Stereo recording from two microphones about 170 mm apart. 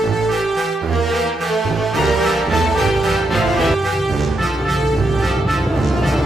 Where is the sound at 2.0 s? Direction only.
Centre (ahead or behind).